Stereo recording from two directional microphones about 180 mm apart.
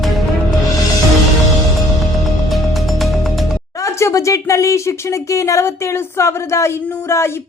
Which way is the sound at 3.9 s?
15° left (ahead or behind).